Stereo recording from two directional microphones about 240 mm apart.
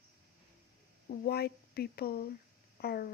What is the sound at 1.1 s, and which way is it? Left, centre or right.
A woman's voice, left.